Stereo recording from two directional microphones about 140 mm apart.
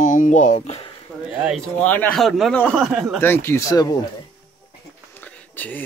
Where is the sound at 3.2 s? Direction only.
15° left (ahead or behind).